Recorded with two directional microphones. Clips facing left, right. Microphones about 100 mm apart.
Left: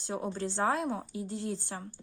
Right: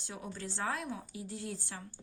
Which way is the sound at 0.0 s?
35° left (ahead or behind).